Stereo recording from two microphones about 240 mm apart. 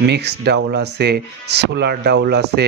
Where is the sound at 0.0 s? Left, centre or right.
Right.